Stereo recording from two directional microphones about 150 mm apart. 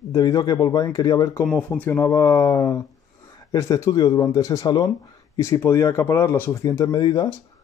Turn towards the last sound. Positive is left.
turn(degrees=25)  # may be behind; listen again after turning